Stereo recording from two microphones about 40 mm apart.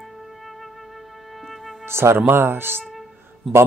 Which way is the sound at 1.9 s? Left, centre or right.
Right.